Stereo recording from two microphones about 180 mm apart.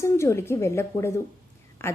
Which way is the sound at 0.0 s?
15° left (ahead or behind).